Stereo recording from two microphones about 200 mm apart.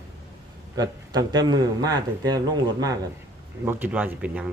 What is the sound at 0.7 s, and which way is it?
Speech, 20° right (ahead or behind).